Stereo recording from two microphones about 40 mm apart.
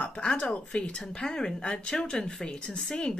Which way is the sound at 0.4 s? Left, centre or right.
Left.